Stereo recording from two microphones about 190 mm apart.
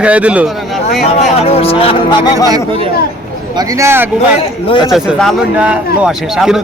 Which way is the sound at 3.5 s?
15° right (ahead or behind).